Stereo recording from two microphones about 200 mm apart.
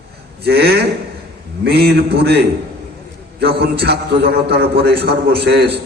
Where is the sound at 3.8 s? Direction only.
55° right (ahead or behind).